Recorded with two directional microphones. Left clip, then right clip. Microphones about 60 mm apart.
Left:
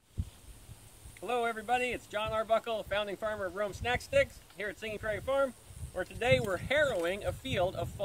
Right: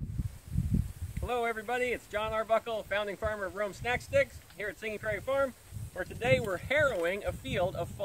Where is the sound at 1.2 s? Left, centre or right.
Right.